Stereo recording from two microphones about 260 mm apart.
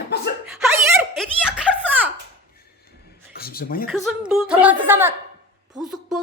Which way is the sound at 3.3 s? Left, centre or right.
Left.